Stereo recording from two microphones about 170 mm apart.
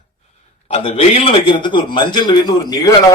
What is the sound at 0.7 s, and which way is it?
A man's voice, 35° left (ahead or behind).